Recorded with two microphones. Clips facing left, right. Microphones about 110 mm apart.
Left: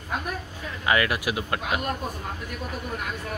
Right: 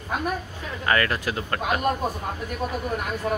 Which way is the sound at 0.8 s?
10° left (ahead or behind).